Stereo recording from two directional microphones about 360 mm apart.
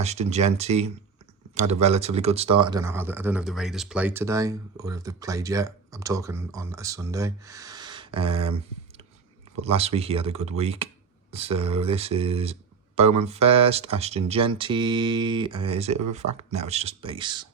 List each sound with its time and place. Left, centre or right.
0.0 s speech: centre